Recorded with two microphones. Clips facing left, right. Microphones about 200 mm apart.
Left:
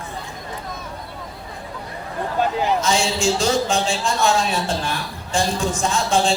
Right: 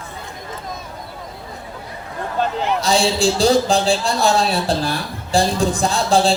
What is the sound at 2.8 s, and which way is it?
A man's voice, 35° right (ahead or behind).